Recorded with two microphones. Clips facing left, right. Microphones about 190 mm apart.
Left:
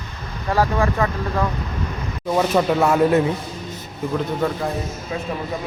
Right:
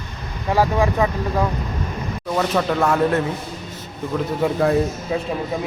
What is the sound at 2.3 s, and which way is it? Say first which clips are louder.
Speech: left 2 dB; 10° left (ahead or behind).